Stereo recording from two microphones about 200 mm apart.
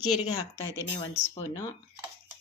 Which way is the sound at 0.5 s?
15° right (ahead or behind).